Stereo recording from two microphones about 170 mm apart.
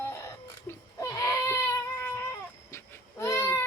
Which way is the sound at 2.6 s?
15° left (ahead or behind).